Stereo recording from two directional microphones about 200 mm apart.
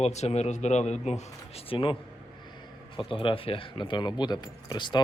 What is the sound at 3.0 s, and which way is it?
Speech, 25° left (ahead or behind).